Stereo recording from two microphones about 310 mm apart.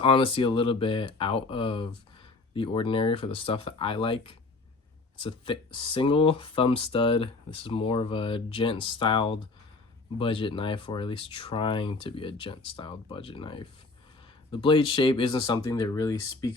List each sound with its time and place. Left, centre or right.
0.0 s speech: centre